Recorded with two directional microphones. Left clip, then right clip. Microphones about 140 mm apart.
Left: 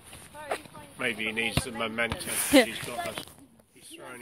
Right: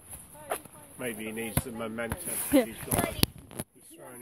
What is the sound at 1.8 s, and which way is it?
Speech, 60° right (ahead or behind).